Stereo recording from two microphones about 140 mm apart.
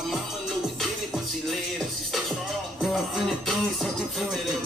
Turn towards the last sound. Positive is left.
turn(degrees=0)  # may be behind; listen again after turning